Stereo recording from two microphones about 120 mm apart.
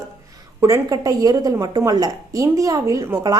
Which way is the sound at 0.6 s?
30° right (ahead or behind).